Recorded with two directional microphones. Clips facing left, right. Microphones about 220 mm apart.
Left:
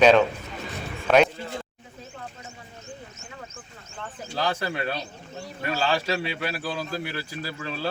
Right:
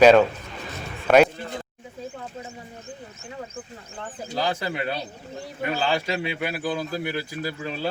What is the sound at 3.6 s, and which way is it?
Speech, 30° right (ahead or behind).